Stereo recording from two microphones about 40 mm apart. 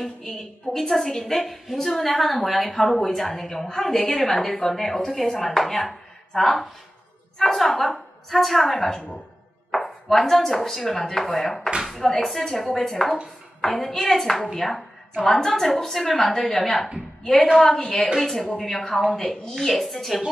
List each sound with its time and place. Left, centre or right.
0.0 s a woman's voice: centre
16.1 s a woman's voice: centre
16.5 s speech: centre
17.2 s a woman's voice: left
17.6 s a woman's voice: centre